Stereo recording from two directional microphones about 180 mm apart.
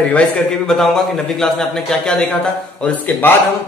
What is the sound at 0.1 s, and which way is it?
A man's voice, 5° left (ahead or behind).